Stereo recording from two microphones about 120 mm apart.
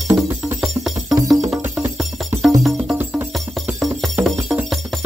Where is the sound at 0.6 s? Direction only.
Centre (ahead or behind).